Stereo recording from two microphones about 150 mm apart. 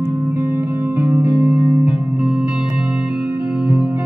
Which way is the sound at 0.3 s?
15° right (ahead or behind).